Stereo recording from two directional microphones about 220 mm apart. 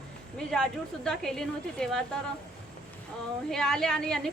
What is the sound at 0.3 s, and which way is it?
Speech, 5° left (ahead or behind).